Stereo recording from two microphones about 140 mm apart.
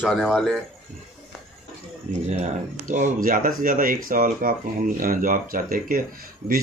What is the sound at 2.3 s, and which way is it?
Speech, 55° right (ahead or behind).